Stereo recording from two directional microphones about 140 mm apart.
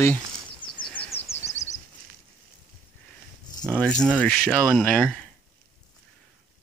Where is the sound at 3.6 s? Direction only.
5° left (ahead or behind).